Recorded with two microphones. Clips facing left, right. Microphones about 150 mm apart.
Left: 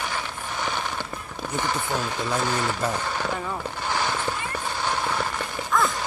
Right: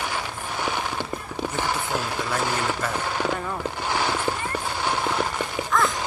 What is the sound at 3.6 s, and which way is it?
Vehicle, 15° right (ahead or behind).